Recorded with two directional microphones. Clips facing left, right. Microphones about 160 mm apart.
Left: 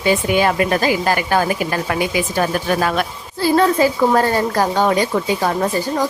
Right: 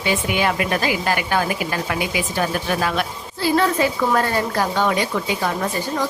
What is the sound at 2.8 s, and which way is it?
Speech, 45° left (ahead or behind).